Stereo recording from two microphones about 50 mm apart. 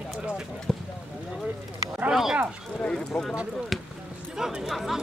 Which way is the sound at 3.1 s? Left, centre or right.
Centre.